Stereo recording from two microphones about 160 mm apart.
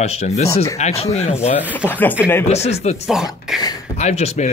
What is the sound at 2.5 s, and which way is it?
Speech, 40° left (ahead or behind).